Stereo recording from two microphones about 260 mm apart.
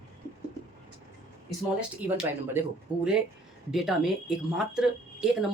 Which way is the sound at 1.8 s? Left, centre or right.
Centre.